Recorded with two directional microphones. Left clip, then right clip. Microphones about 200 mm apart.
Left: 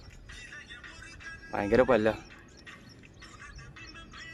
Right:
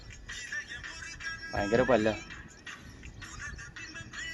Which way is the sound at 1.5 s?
35° left (ahead or behind).